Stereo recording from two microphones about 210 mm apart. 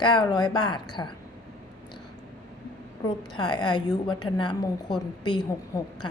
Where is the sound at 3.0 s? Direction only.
20° left (ahead or behind).